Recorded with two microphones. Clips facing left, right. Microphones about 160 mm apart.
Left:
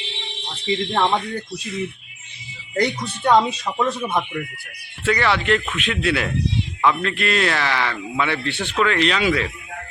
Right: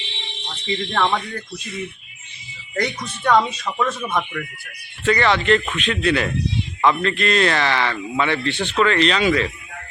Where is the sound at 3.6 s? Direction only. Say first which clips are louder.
Left 1 dB; 15° left (ahead or behind).